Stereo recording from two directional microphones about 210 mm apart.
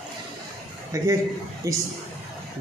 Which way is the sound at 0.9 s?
15° right (ahead or behind).